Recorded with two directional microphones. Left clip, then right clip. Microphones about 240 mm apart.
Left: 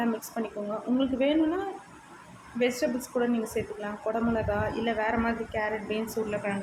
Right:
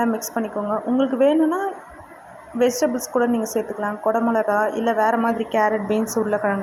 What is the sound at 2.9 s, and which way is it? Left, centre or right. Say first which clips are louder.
Speech: right 9 dB; centre.